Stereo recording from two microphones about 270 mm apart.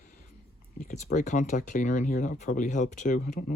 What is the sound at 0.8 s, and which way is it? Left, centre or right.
Speech, left.